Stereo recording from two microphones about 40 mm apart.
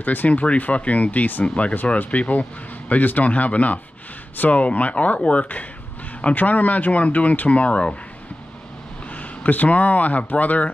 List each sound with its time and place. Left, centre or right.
0.0 s speech: left
0.3 s speech: left
1.4 s speech: left
9.1 s speech: left